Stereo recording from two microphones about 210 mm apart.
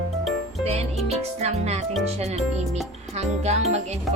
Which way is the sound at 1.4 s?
30° right (ahead or behind).